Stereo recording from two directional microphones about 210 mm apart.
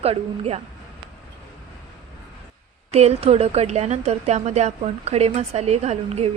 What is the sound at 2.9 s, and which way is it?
A woman's voice, 30° right (ahead or behind).